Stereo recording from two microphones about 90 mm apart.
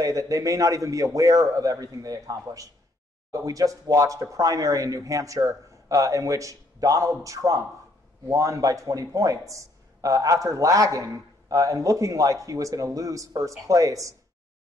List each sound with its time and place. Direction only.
0.0 s a man's voice: 40° right (ahead or behind)